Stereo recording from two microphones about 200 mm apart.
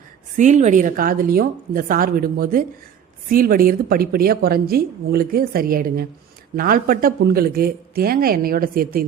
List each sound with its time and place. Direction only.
0.3 s a woman's voice: 35° right (ahead or behind)